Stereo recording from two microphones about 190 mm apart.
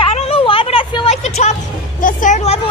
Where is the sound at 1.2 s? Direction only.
35° left (ahead or behind).